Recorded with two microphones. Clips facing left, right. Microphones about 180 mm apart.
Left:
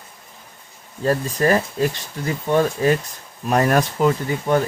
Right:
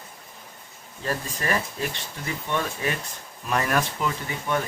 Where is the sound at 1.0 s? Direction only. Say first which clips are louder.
Left 10 dB; 40° left (ahead or behind).